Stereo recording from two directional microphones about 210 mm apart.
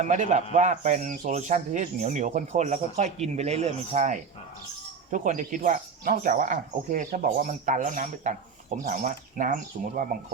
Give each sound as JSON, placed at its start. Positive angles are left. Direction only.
{"t": 0.0, "sound": "speech", "side_deg": -35}